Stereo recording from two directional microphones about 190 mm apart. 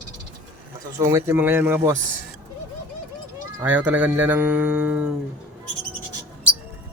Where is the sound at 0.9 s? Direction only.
15° right (ahead or behind).